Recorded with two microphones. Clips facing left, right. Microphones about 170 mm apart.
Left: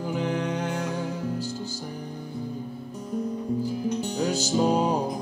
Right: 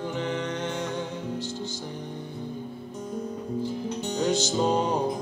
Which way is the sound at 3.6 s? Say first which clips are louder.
Left 3 dB; 40° left (ahead or behind).